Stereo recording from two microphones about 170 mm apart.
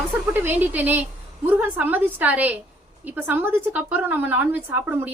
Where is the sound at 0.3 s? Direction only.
10° right (ahead or behind).